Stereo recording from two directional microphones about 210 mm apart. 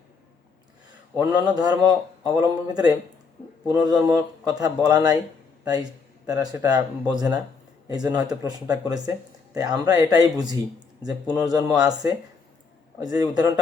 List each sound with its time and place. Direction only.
1.1 s speech: 15° right (ahead or behind)
6.2 s speech: 15° right (ahead or behind)
11.7 s speech: 5° right (ahead or behind)
13.0 s speech: 20° right (ahead or behind)